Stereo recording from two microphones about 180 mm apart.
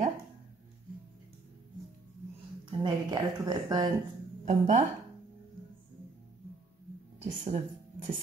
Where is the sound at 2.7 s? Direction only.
25° right (ahead or behind).